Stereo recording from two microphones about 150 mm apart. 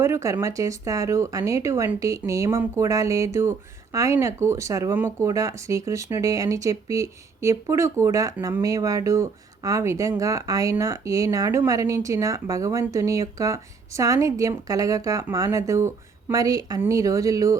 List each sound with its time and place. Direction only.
0.0 s speech: 20° right (ahead or behind)